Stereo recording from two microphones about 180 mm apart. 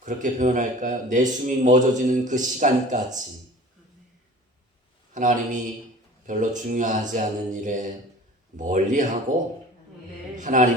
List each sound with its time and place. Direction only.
0.0 s a man's voice: 45° right (ahead or behind)
5.1 s a man's voice: 45° right (ahead or behind)